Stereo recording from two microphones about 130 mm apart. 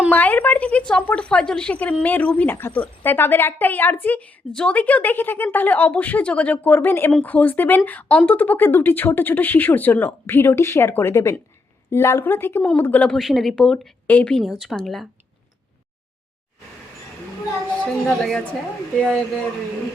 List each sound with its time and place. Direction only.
0.1 s a woman's voice: 15° left (ahead or behind)
17.8 s a woman's voice: 5° left (ahead or behind)